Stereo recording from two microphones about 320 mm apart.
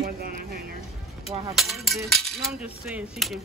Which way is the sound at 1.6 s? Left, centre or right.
Centre.